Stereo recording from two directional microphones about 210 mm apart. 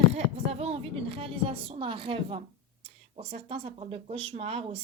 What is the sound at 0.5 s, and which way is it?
Speech, 30° right (ahead or behind).